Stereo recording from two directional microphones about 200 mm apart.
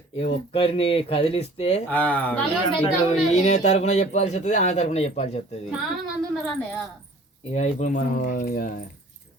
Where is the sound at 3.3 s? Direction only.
35° left (ahead or behind).